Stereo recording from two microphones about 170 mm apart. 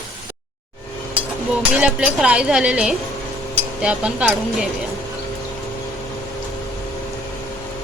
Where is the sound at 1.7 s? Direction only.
5° right (ahead or behind).